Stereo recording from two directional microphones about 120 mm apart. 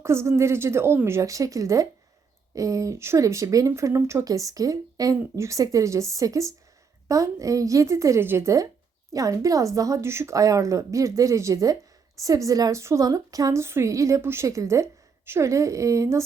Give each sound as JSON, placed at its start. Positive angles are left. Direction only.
{"t": 0.0, "sound": "a woman's voice", "side_deg": -20}